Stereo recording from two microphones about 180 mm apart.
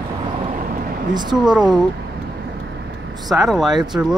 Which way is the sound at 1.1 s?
25° right (ahead or behind).